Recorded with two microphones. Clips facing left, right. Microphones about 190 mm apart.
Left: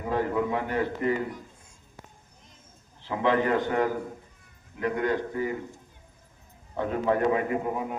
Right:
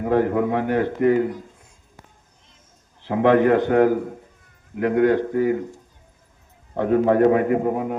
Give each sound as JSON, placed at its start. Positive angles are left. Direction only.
{"t": 0.0, "sound": "a man's voice", "side_deg": -55}
{"t": 3.0, "sound": "a man's voice", "side_deg": -55}
{"t": 6.7, "sound": "a man's voice", "side_deg": -55}